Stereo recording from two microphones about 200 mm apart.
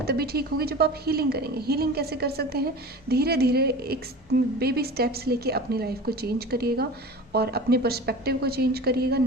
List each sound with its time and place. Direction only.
0.0 s a woman's voice: 50° right (ahead or behind)